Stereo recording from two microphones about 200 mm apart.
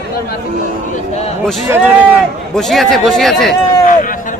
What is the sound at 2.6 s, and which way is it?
Speech, centre (ahead or behind).